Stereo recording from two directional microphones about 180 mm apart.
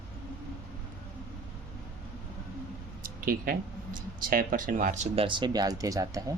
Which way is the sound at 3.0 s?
50° right (ahead or behind).